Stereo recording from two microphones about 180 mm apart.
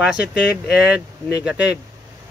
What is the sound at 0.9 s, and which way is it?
Speech, 70° left (ahead or behind).